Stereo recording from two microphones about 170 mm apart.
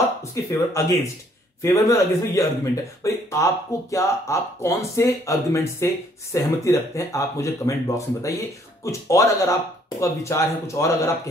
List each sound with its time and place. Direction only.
0.2 s speech: 20° left (ahead or behind)